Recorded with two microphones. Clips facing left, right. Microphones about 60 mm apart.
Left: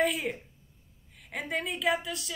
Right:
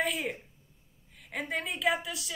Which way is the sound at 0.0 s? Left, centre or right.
Centre.